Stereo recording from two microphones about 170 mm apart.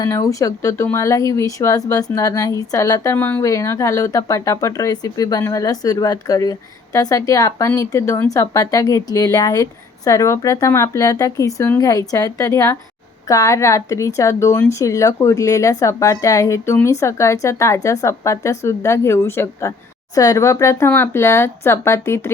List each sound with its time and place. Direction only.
0.0 s a woman's voice: 20° left (ahead or behind)